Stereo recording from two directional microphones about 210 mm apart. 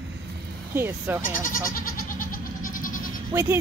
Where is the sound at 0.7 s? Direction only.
10° right (ahead or behind).